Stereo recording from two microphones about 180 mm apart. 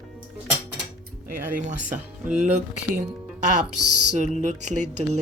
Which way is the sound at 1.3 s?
50° right (ahead or behind).